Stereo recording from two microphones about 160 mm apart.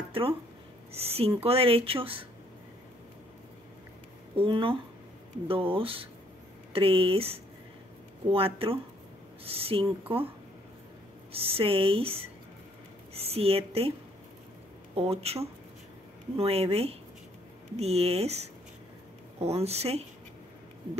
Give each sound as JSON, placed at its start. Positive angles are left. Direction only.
{"t": 0.1, "sound": "speech", "side_deg": -35}
{"t": 4.4, "sound": "speech", "side_deg": -35}
{"t": 11.3, "sound": "speech", "side_deg": -35}
{"t": 15.0, "sound": "speech", "side_deg": -40}
{"t": 19.4, "sound": "speech", "side_deg": -40}